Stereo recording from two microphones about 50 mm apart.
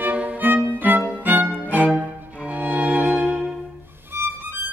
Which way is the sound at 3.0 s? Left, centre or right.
Centre.